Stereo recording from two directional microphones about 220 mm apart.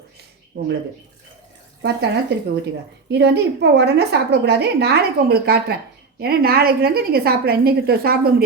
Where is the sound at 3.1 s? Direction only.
50° right (ahead or behind).